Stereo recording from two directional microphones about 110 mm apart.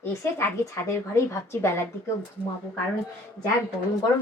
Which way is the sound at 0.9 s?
25° left (ahead or behind).